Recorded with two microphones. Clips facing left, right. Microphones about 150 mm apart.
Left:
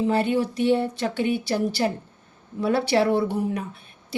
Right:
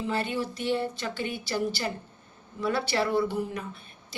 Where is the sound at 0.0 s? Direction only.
60° left (ahead or behind).